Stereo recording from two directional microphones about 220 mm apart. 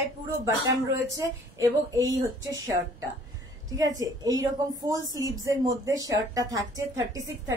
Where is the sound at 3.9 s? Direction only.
15° right (ahead or behind).